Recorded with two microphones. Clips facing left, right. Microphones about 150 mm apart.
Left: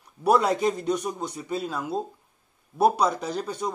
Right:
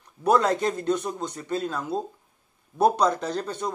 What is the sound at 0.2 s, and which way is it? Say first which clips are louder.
Speech: even; 10° left (ahead or behind).